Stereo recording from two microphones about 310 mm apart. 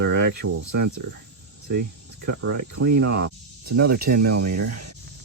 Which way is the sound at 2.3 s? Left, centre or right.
Right.